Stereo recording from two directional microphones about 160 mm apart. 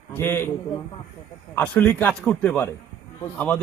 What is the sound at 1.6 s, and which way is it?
A man's voice, 10° left (ahead or behind).